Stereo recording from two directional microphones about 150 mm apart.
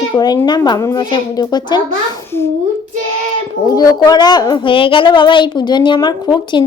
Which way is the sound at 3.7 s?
25° left (ahead or behind).